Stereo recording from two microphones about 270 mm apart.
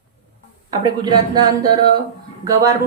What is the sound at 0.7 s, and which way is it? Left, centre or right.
Speech, centre.